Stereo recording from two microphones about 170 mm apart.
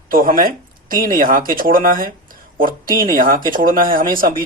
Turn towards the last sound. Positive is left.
turn(degrees=-55)  # may be behind; listen again after turning